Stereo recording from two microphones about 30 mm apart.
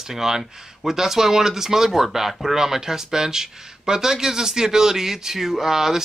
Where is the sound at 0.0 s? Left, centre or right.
Centre.